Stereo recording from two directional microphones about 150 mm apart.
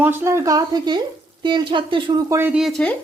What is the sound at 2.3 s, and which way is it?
Speech, 15° right (ahead or behind).